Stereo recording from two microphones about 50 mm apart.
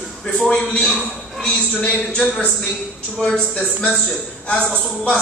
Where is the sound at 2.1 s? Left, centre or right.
Centre.